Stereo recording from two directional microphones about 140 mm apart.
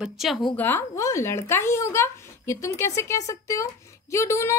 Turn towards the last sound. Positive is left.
turn(degrees=20)  # may be behind; listen again after turning